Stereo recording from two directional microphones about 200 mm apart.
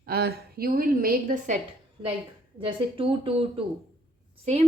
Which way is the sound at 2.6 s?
25° right (ahead or behind).